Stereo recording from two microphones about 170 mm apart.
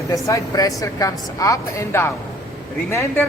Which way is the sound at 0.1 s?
20° left (ahead or behind).